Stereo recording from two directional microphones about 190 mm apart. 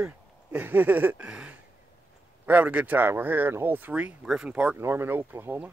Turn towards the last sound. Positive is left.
turn(degrees=-10)  # may be behind; listen again after turning